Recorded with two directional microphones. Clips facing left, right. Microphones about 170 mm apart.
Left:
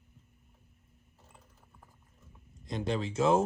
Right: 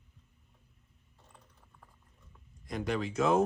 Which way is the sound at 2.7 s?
25° left (ahead or behind).